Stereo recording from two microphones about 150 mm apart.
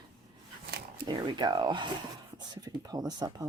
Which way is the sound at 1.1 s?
30° right (ahead or behind).